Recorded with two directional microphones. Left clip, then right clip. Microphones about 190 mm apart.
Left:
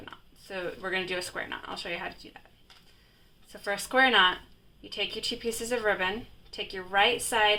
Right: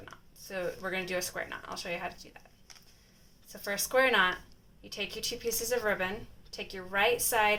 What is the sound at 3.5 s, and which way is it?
Speech, 45° left (ahead or behind).